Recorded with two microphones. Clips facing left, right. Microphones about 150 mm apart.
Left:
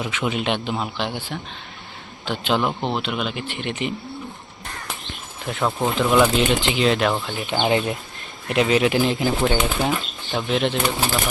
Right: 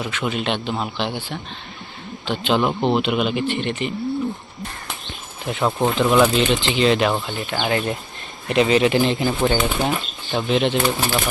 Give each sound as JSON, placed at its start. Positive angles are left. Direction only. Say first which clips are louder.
{"t": 0.0, "sound": "a man's voice", "louder": "even", "side_deg": 10}
{"t": 3.4, "sound": "a man's voice", "louder": "right 4 dB", "side_deg": 10}
{"t": 5.5, "sound": "speech", "louder": "right 2 dB", "side_deg": -5}
{"t": 7.4, "sound": "speech", "louder": "left 4 dB", "side_deg": 20}
{"t": 8.4, "sound": "speech", "louder": "right 2 dB", "side_deg": 5}